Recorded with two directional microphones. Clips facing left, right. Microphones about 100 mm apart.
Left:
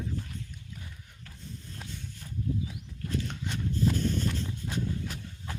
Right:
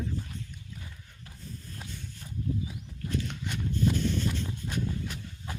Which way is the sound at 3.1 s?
30° left (ahead or behind).